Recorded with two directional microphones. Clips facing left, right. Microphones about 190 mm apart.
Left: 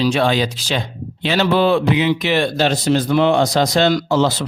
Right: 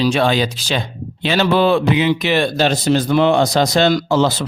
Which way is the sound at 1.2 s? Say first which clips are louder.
Right 1 dB; 50° right (ahead or behind).